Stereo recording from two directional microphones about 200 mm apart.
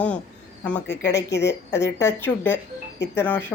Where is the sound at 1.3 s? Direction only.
60° left (ahead or behind).